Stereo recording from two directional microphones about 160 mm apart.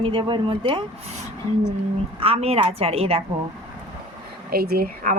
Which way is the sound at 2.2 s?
40° right (ahead or behind).